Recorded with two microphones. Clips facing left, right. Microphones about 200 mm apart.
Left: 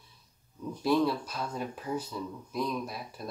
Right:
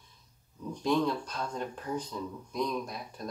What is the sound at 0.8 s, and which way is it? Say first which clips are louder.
Speech: left 2 dB; 5° left (ahead or behind).